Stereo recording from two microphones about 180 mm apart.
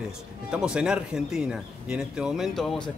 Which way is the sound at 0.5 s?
5° right (ahead or behind).